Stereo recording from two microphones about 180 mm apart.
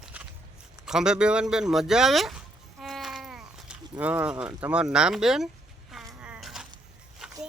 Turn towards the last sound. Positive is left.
turn(degrees=0)  # may be behind; listen again after turning